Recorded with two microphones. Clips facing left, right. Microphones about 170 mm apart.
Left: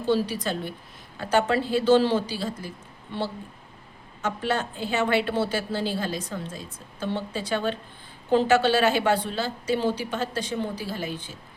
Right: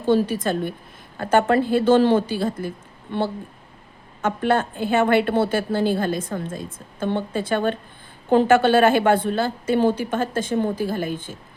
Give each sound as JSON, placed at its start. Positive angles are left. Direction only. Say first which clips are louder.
{"t": 0.0, "sound": "a woman's voice", "louder": "right 5 dB", "side_deg": -50}